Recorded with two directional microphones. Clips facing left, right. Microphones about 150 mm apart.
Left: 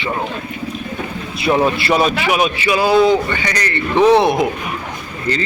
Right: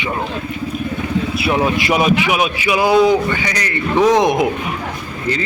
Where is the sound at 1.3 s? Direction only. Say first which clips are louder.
Left 4 dB; 5° right (ahead or behind).